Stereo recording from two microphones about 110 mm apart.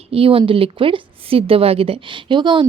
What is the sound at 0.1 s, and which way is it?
Speech, 60° right (ahead or behind).